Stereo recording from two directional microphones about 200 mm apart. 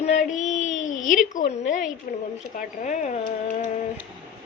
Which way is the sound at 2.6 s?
40° left (ahead or behind).